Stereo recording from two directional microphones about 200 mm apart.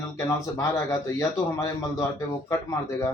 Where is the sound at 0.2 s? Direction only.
15° left (ahead or behind).